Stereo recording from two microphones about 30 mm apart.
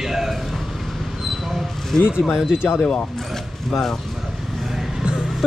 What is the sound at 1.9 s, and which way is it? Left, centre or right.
Speech, centre.